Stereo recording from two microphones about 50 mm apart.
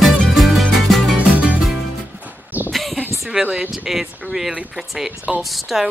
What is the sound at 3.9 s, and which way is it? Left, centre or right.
Speech, centre.